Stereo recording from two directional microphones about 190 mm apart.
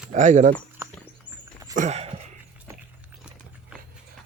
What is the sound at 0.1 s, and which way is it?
Speech, 40° right (ahead or behind).